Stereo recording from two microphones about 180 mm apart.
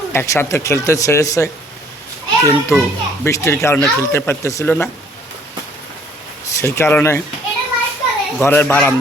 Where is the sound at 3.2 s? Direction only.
15° left (ahead or behind).